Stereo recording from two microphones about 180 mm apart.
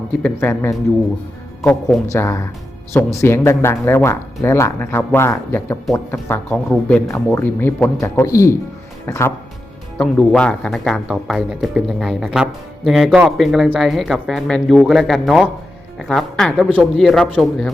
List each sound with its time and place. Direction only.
0.2 s speech: 10° left (ahead or behind)
2.1 s speech: 15° left (ahead or behind)